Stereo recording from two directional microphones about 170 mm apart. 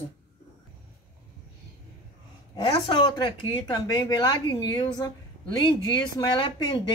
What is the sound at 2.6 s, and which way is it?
Speech, 30° left (ahead or behind).